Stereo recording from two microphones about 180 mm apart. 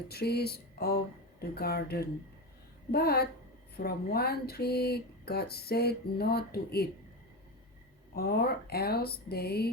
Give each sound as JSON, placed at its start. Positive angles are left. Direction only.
{"t": 0.1, "sound": "speech", "side_deg": 60}
{"t": 8.1, "sound": "speech", "side_deg": 60}